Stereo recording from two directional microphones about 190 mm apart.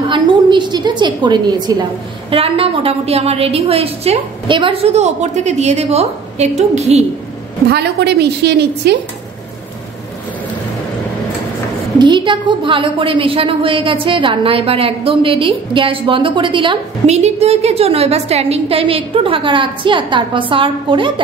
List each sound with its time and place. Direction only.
0.1 s a woman's voice: 25° right (ahead or behind)
7.7 s a woman's voice: 60° right (ahead or behind)
12.0 s a woman's voice: 25° right (ahead or behind)